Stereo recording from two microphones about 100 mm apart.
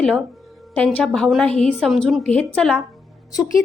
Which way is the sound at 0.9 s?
5° left (ahead or behind).